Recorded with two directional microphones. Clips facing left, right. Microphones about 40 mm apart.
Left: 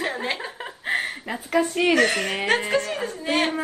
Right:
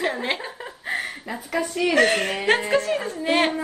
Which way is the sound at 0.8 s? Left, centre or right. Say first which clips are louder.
Left 3 dB; left.